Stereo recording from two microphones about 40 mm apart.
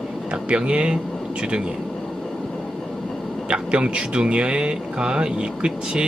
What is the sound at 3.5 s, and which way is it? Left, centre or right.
Speech, right.